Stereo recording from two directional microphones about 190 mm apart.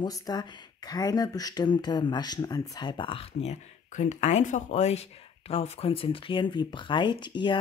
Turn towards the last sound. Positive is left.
turn(degrees=25)  # may be behind; listen again after turning